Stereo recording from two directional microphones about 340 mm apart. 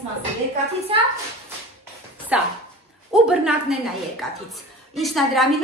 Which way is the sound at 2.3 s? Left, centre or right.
Centre.